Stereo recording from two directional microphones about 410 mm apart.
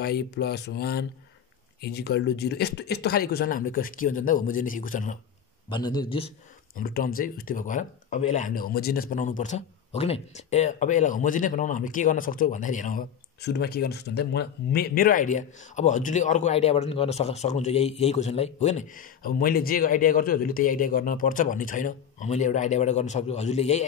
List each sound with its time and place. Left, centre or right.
0.0 s speech: left